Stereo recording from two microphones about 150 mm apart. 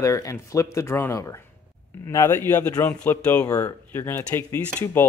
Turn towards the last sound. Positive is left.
turn(degrees=15)  # may be behind; listen again after turning